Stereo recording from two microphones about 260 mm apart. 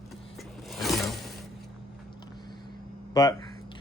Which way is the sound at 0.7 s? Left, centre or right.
Centre.